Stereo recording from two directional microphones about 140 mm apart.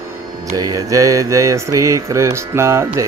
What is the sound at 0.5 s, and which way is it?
Speech, 25° right (ahead or behind).